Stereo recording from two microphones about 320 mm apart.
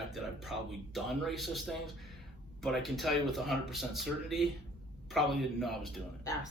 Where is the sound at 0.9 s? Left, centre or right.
Centre.